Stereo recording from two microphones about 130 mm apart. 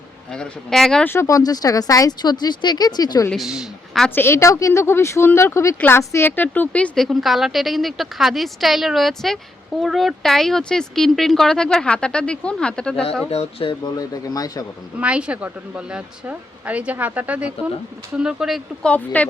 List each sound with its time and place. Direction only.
0.3 s speech: 5° left (ahead or behind)
1.0 s speech: 20° left (ahead or behind)
3.2 s a woman's voice: centre (ahead or behind)
4.1 s speech: 20° left (ahead or behind)
13.3 s speech: 45° left (ahead or behind)
13.8 s speech: 30° left (ahead or behind)
14.9 s a woman's voice: 10° right (ahead or behind)
18.9 s speech: 10° left (ahead or behind)